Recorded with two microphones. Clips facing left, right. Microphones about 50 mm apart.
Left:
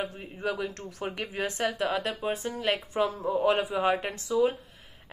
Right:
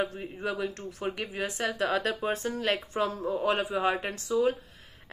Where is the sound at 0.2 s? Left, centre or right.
Centre.